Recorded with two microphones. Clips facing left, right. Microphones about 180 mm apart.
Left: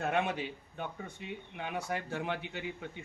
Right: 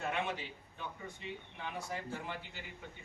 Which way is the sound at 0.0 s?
60° left (ahead or behind).